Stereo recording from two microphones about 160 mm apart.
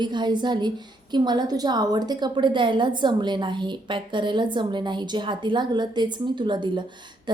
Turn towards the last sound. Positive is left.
turn(degrees=-30)  # may be behind; listen again after turning